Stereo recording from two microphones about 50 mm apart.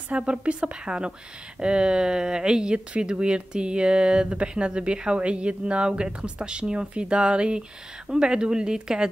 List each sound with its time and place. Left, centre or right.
0.1 s speech: right